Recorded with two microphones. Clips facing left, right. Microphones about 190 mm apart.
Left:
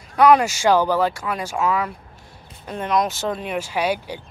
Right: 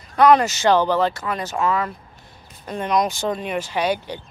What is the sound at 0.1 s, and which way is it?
Speech, 10° left (ahead or behind).